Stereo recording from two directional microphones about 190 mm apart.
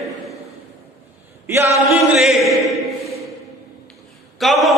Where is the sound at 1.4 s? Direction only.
15° right (ahead or behind).